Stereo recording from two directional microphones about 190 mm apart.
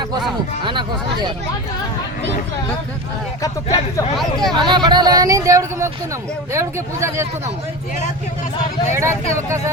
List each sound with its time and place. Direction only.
0.6 s speech: 25° right (ahead or behind)
3.4 s speech: 20° left (ahead or behind)
4.2 s speech: centre (ahead or behind)
4.6 s speech: 25° right (ahead or behind)
8.9 s speech: 15° right (ahead or behind)